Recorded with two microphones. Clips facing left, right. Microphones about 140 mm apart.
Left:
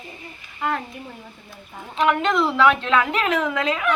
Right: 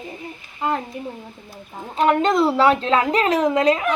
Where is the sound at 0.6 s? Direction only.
25° right (ahead or behind).